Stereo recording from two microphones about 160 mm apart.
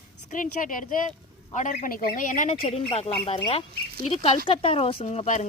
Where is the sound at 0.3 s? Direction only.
55° left (ahead or behind).